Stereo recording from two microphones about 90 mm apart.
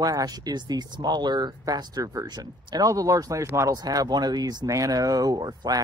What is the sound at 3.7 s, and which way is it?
Speech, 45° right (ahead or behind).